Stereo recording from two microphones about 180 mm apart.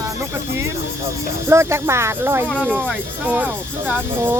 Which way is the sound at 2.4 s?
5° left (ahead or behind).